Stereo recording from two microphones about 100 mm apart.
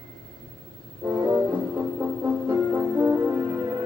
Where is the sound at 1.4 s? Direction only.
20° right (ahead or behind).